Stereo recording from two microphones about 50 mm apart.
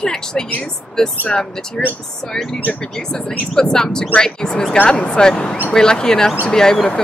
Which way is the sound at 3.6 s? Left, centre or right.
Centre.